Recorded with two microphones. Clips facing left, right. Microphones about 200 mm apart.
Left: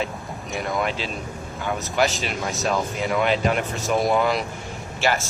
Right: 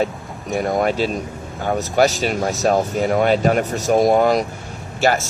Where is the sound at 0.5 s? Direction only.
45° right (ahead or behind).